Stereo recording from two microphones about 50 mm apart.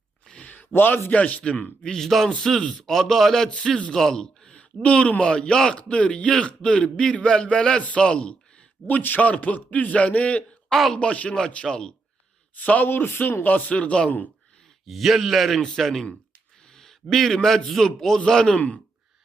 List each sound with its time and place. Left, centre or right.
0.4 s a sound: left
0.7 s speech: left
1.1 s a man's voice: left
1.8 s speech: centre
2.0 s a man's voice: centre; by 8.4 s left
8.9 s a man's voice: left; by 11.9 s centre
12.6 s speech: left
12.9 s a man's voice: left
14.8 s a man's voice: centre